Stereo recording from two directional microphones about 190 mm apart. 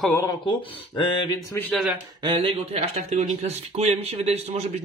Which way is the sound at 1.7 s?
Centre (ahead or behind).